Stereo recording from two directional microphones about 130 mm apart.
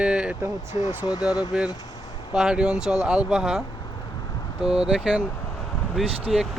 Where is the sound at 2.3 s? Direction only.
5° right (ahead or behind).